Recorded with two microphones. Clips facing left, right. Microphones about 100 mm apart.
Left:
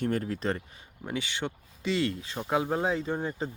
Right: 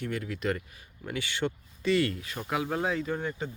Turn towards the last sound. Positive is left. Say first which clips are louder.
# left 1 dB
turn(degrees=30)  # may be behind; listen again after turning